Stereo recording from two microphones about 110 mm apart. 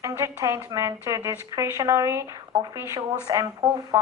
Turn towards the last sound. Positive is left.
turn(degrees=-35)  # may be behind; listen again after turning